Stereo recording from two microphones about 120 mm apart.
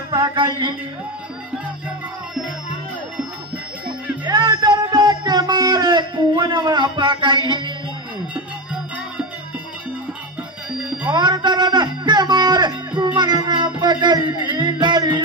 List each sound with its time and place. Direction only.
0.1 s speech: 40° right (ahead or behind)
4.2 s music: 40° right (ahead or behind)
11.1 s music: 40° right (ahead or behind)